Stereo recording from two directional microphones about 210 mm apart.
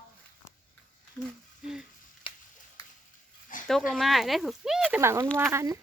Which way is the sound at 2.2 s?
25° left (ahead or behind).